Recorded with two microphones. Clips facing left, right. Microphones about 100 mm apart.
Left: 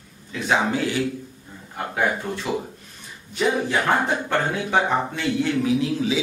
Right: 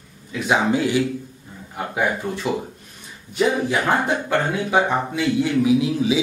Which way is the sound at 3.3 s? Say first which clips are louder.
Right 2 dB; centre (ahead or behind).